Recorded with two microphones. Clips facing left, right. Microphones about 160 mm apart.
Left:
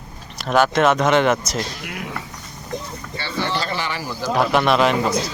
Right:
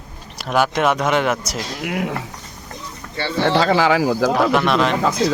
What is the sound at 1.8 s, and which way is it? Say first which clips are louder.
Speech: right 8 dB; 70° right (ahead or behind).